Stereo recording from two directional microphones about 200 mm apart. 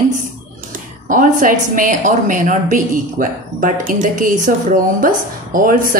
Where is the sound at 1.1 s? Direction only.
40° right (ahead or behind).